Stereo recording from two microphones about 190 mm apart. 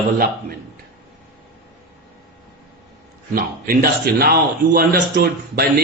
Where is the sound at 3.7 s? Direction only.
55° right (ahead or behind).